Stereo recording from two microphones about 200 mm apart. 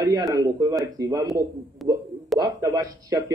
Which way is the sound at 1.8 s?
Centre (ahead or behind).